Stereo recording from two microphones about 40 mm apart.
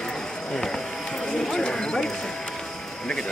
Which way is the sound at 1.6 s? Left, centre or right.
Left.